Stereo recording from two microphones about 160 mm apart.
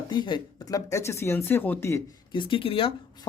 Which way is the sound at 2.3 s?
30° left (ahead or behind).